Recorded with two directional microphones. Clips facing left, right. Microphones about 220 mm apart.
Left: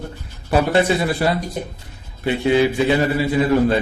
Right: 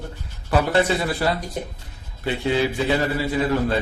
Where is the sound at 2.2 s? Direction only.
15° left (ahead or behind).